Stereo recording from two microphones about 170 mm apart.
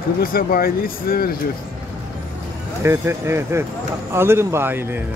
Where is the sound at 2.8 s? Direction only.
15° right (ahead or behind).